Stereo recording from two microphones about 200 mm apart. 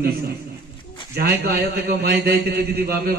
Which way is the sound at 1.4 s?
55° right (ahead or behind).